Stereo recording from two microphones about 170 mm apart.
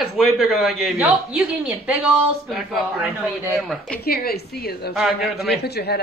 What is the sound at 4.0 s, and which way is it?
A woman's voice, 65° left (ahead or behind).